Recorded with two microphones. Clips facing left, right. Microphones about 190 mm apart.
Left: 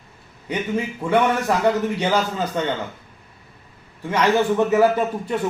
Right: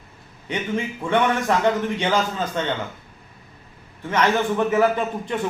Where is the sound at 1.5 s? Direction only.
10° left (ahead or behind).